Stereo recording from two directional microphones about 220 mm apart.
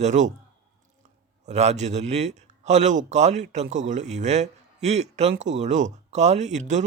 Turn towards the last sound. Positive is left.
turn(degrees=-30)  # may be behind; listen again after turning